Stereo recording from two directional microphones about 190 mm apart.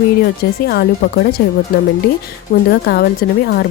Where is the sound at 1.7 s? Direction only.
55° left (ahead or behind).